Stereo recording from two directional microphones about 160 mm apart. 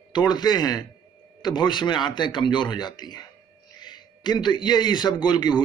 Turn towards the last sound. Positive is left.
turn(degrees=25)  # may be behind; listen again after turning